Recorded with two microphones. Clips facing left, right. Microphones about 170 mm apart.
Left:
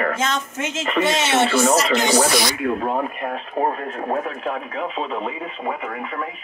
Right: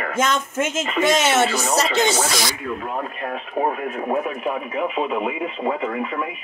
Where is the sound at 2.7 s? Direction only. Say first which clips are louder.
Left 5 dB; 35° left (ahead or behind).